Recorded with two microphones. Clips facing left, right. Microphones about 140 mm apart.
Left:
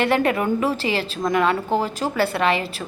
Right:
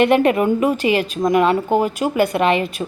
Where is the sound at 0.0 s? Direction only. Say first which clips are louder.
Right 5 dB; 20° right (ahead or behind).